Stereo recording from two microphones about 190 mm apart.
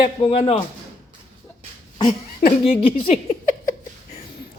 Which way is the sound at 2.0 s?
30° left (ahead or behind).